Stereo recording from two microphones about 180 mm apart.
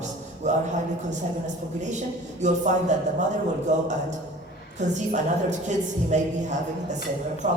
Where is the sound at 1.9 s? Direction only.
40° right (ahead or behind).